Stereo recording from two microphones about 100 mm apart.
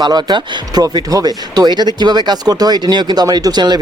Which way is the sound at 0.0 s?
45° right (ahead or behind).